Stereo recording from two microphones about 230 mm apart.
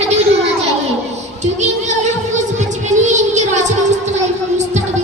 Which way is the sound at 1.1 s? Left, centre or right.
Right.